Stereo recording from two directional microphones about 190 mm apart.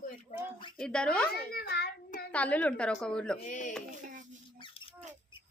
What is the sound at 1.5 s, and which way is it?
Child singing, 55° left (ahead or behind).